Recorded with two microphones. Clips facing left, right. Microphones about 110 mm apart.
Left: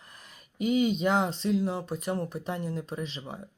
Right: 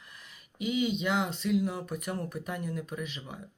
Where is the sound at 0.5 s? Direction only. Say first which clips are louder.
Left 4 dB; 45° left (ahead or behind).